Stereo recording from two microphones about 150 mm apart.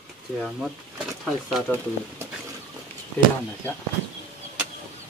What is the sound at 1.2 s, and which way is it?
Speech, centre (ahead or behind).